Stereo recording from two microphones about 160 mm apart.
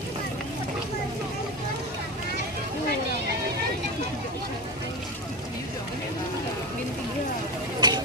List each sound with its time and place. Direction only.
7.8 s vehicle: 25° right (ahead or behind)